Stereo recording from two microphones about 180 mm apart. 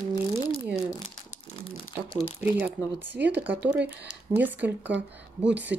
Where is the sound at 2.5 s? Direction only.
10° right (ahead or behind).